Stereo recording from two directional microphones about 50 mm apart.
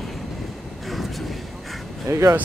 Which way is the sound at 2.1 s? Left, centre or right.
Right.